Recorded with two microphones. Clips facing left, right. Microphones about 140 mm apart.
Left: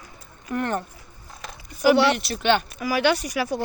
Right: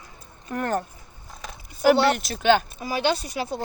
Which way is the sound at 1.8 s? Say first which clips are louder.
Left 1 dB; 45° right (ahead or behind).